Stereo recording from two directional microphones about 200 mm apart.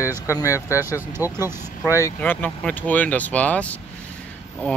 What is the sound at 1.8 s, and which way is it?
Speech, 15° left (ahead or behind).